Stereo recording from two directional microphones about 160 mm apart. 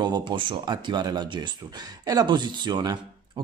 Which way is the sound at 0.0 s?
25° right (ahead or behind).